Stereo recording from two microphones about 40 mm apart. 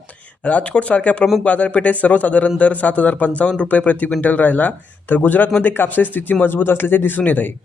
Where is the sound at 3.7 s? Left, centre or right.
Left.